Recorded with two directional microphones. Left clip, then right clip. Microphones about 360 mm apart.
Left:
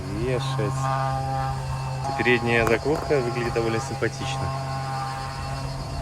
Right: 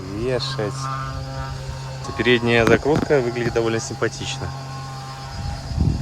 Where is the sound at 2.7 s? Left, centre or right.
Right.